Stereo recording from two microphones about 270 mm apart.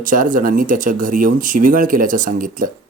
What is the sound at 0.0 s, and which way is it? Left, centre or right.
Speech, right.